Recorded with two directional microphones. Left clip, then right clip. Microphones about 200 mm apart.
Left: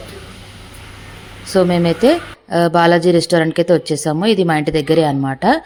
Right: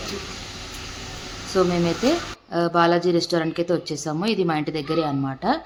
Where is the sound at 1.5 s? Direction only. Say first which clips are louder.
Left 7 dB; 30° left (ahead or behind).